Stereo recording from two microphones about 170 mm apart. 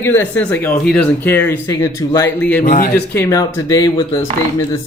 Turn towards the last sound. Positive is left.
turn(degrees=15)  # may be behind; listen again after turning